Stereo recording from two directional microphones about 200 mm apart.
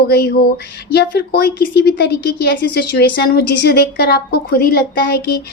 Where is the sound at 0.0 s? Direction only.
55° left (ahead or behind).